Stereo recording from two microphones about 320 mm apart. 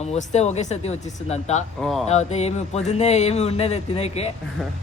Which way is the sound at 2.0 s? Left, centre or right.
Left.